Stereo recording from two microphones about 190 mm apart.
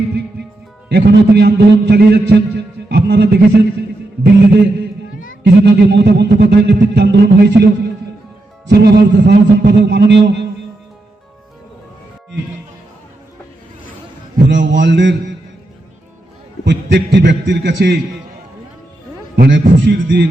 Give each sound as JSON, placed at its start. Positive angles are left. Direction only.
{"t": 0.9, "sound": "a man's voice", "side_deg": -60}
{"t": 14.4, "sound": "a man's voice", "side_deg": -70}
{"t": 16.6, "sound": "a man's voice", "side_deg": -65}
{"t": 19.4, "sound": "a man's voice", "side_deg": -70}